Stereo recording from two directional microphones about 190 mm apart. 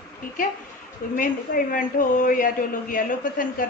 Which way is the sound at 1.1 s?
45° left (ahead or behind).